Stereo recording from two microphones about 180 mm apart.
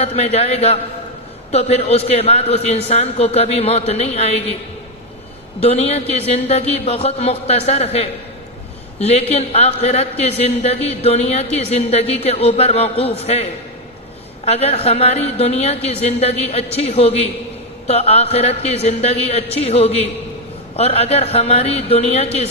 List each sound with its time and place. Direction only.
0.0 s a man's voice: 35° left (ahead or behind)
5.6 s a man's voice: 35° left (ahead or behind)